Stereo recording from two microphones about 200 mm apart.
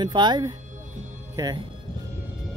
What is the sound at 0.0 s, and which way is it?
Speech, 20° right (ahead or behind).